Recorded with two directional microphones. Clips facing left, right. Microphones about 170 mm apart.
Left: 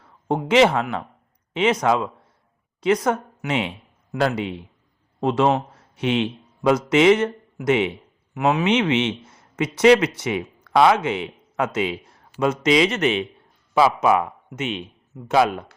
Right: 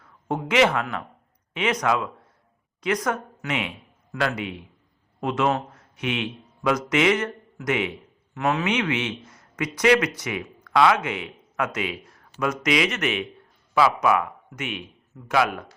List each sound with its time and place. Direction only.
0.3 s speech: 30° left (ahead or behind)
5.2 s a man's voice: 30° left (ahead or behind)
8.3 s speech: 15° left (ahead or behind)
8.6 s speech: 25° left (ahead or behind)